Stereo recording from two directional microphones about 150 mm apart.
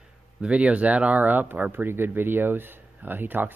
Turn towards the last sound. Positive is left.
turn(degrees=-10)  # may be behind; listen again after turning